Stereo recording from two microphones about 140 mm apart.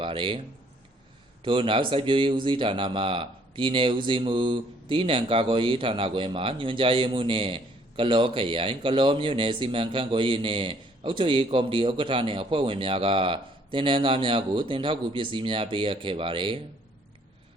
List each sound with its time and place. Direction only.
0.0 s a man's voice: 35° right (ahead or behind)
1.5 s speech: 35° right (ahead or behind)